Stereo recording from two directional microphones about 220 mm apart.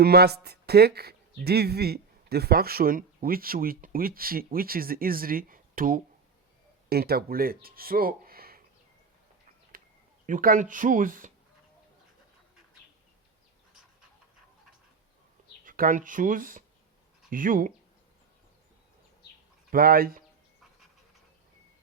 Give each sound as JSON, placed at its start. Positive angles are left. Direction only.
{"t": 0.0, "sound": "speech", "side_deg": -45}
{"t": 10.2, "sound": "speech", "side_deg": -40}
{"t": 15.6, "sound": "speech", "side_deg": -40}
{"t": 19.7, "sound": "speech", "side_deg": -45}